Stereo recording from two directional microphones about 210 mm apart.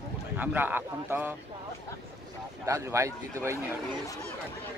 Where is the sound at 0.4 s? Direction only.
10° right (ahead or behind).